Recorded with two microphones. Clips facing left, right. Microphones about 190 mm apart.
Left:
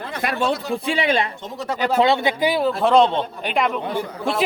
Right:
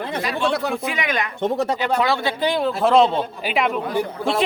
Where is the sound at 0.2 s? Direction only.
55° left (ahead or behind).